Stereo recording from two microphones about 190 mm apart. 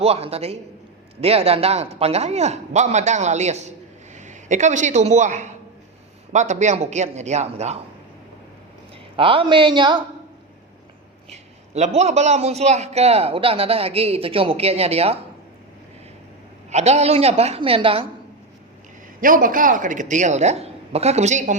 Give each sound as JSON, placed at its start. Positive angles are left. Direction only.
{"t": 0.0, "sound": "a man's voice", "side_deg": -30}
{"t": 9.1, "sound": "speech", "side_deg": -30}
{"t": 11.3, "sound": "a man's voice", "side_deg": -35}
{"t": 16.6, "sound": "a man's voice", "side_deg": -35}
{"t": 19.2, "sound": "a man's voice", "side_deg": -45}